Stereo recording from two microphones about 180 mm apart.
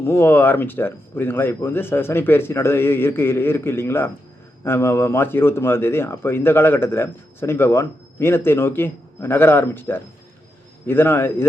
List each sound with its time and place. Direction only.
0.0 s speech: 15° left (ahead or behind)